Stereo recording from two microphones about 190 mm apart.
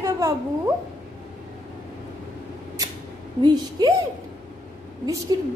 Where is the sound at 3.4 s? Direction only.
20° right (ahead or behind).